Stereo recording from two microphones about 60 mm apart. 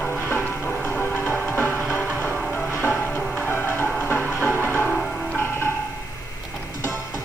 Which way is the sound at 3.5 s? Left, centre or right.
Left.